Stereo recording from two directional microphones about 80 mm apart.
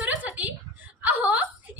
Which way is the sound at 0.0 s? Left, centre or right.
Centre.